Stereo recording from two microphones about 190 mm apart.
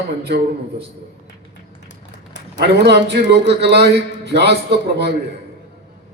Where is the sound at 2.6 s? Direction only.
60° right (ahead or behind).